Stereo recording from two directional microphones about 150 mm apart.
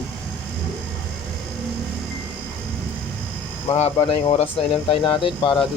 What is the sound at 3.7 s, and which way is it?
Speech, 40° left (ahead or behind).